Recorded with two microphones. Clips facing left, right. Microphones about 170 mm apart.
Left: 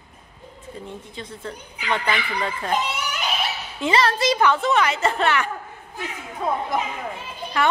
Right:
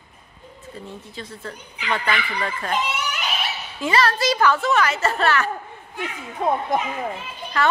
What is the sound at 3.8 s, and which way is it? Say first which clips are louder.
A woman's voice: even; 20° left (ahead or behind).